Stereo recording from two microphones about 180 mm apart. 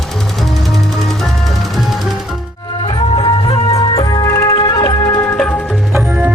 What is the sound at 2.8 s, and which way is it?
Music, 30° left (ahead or behind).